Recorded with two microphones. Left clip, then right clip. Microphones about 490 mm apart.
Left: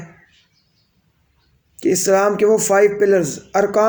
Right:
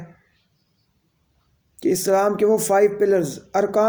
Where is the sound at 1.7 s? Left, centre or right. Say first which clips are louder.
Left 3 dB; right.